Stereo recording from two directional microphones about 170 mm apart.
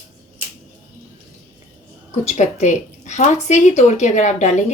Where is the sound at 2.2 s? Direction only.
45° left (ahead or behind).